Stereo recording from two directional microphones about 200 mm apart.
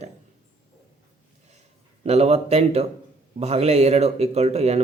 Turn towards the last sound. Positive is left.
turn(degrees=-30)  # may be behind; listen again after turning